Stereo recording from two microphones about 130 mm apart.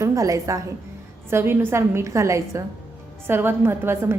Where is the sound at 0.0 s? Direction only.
25° right (ahead or behind).